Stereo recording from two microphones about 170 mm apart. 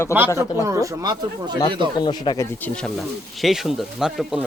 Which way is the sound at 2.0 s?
25° left (ahead or behind).